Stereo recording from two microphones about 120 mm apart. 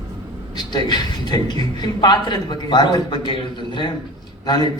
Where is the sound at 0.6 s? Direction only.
35° left (ahead or behind).